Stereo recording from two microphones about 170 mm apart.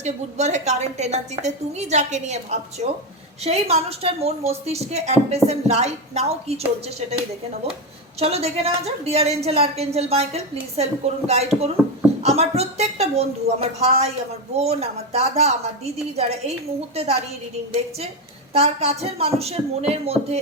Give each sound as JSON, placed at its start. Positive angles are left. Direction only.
{"t": 0.0, "sound": "a woman's voice", "side_deg": -40}
{"t": 8.2, "sound": "a woman's voice", "side_deg": -40}
{"t": 18.5, "sound": "a woman's voice", "side_deg": -40}